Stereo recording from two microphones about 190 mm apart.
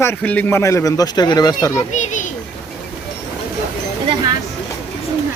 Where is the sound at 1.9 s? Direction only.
40° left (ahead or behind).